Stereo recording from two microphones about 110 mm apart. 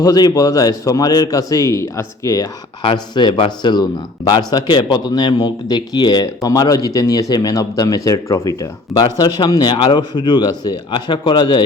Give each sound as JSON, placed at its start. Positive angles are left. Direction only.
{"t": 0.0, "sound": "speech", "side_deg": 35}
{"t": 2.8, "sound": "speech", "side_deg": 45}